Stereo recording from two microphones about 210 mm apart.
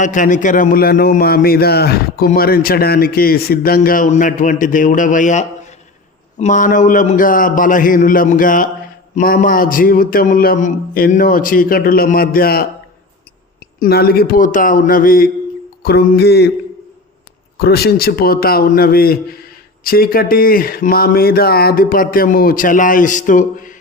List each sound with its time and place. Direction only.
0.0 s a man's voice: 35° left (ahead or behind)
13.7 s a man's voice: 45° left (ahead or behind)
17.6 s a man's voice: 50° left (ahead or behind)